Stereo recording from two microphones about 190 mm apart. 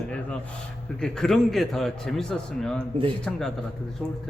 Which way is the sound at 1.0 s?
Centre (ahead or behind).